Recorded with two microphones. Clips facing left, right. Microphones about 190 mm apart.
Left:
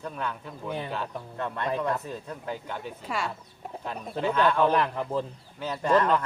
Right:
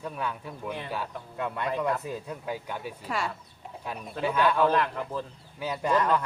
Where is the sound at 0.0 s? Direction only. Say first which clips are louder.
Even; 10° right (ahead or behind).